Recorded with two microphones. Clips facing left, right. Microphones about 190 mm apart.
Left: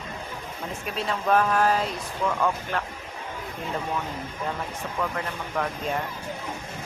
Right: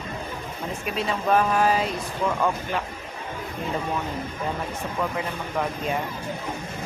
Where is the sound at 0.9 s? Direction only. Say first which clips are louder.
Right 1 dB; 5° right (ahead or behind).